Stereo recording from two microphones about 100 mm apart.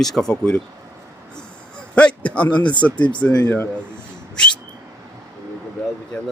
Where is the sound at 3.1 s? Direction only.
10° left (ahead or behind).